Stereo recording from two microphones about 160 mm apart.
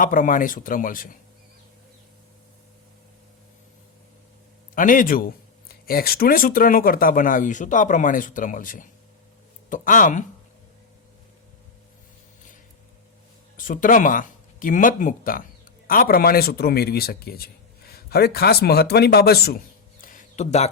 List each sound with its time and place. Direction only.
0.0 s speech: 55° left (ahead or behind)
4.7 s speech: 60° left (ahead or behind)
13.6 s speech: 55° left (ahead or behind)